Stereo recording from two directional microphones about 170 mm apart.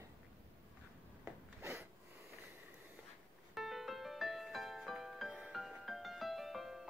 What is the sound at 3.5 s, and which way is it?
Music, centre (ahead or behind).